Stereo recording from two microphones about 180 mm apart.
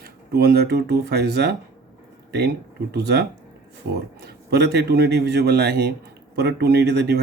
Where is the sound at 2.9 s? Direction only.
65° right (ahead or behind).